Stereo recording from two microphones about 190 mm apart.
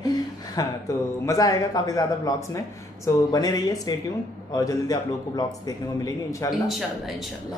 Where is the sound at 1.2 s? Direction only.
20° left (ahead or behind).